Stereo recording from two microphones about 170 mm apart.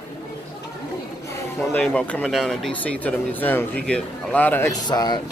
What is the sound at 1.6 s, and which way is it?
Speech, 10° left (ahead or behind).